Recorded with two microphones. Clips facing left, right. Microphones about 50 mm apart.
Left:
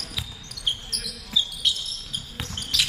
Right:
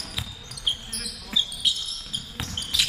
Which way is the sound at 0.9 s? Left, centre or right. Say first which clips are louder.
Left 1 dB; right.